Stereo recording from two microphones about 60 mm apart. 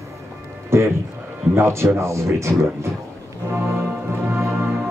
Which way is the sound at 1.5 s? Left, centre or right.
Right.